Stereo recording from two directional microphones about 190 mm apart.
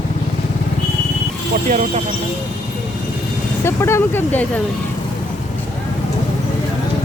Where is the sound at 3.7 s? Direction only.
15° left (ahead or behind).